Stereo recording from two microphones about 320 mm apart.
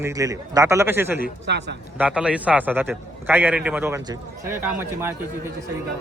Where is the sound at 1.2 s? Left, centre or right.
Right.